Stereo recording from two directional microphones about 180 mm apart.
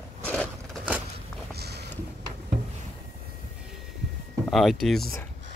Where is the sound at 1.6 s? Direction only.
65° right (ahead or behind).